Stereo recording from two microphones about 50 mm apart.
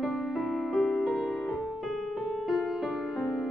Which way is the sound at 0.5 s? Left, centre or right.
Centre.